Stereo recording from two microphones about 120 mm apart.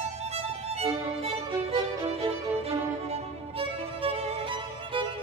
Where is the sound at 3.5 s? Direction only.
50° right (ahead or behind).